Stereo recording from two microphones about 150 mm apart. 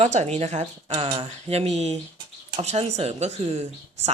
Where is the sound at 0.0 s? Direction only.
50° right (ahead or behind).